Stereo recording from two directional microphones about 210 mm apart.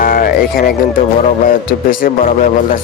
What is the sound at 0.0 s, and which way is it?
Speech, 45° left (ahead or behind).